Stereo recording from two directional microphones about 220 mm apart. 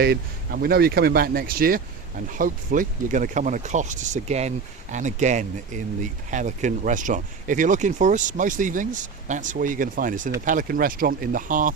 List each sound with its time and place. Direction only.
0.0 s speech: 45° right (ahead or behind)